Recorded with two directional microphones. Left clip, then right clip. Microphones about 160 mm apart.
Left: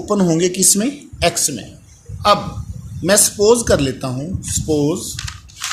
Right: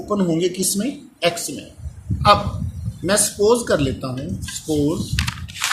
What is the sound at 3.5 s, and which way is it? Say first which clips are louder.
Speech: left 3 dB; 55° left (ahead or behind).